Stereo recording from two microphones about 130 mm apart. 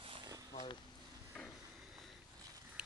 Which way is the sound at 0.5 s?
40° left (ahead or behind).